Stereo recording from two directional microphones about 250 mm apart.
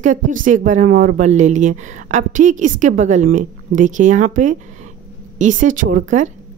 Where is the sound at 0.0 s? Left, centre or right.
Right.